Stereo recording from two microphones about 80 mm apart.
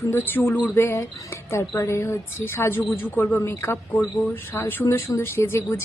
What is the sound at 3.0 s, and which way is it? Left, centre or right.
Speech, left.